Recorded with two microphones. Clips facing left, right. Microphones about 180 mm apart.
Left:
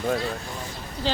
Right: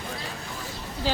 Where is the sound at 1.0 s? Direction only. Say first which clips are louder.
Left 1 dB; 10° right (ahead or behind).